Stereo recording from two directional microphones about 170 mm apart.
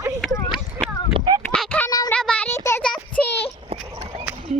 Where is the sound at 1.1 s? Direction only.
25° right (ahead or behind).